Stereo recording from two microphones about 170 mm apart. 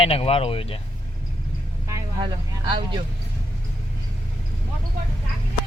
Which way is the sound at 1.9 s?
25° right (ahead or behind).